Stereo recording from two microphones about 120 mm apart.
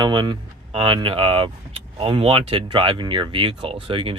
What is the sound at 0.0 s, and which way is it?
Speech, 40° right (ahead or behind).